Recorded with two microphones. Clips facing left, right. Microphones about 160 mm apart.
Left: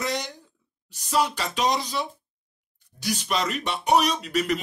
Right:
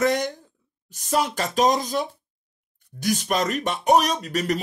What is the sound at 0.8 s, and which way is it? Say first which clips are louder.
Speech: right 1 dB; 45° right (ahead or behind).